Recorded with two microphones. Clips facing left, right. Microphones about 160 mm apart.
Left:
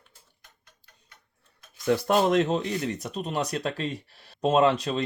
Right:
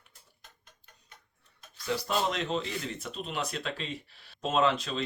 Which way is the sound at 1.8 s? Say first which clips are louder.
Left 8 dB; 55° left (ahead or behind).